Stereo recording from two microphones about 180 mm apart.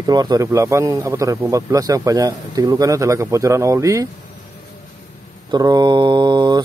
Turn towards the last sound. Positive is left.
turn(degrees=-25)  # may be behind; listen again after turning